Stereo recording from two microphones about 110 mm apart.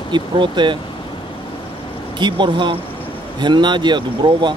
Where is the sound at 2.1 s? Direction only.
45° right (ahead or behind).